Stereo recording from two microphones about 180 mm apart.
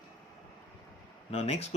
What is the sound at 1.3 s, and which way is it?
Speech, 35° left (ahead or behind).